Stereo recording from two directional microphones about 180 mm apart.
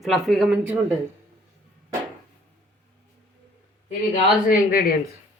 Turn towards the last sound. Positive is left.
turn(degrees=50)  # may be behind; listen again after turning